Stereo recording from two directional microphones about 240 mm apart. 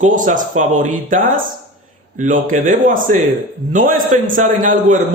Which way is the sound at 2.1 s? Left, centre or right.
Right.